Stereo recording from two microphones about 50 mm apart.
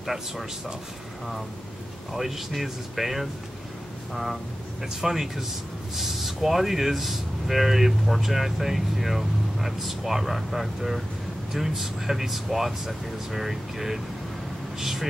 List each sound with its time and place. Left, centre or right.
0.0 s speech: centre
2.1 s speech: centre